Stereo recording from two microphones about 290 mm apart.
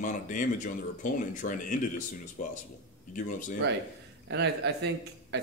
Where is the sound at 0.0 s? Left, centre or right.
Left.